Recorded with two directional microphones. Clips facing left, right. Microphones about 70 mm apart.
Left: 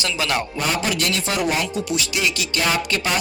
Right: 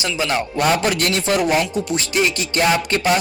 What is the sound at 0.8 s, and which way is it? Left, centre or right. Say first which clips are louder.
Speech: right 3 dB; right.